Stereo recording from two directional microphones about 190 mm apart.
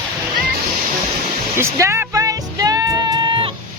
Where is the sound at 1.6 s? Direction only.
15° right (ahead or behind).